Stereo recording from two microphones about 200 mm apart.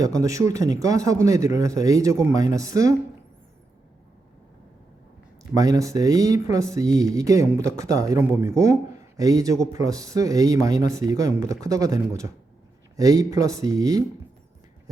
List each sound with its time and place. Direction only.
0.0 s speech: 15° right (ahead or behind)
5.4 s speech: 15° right (ahead or behind)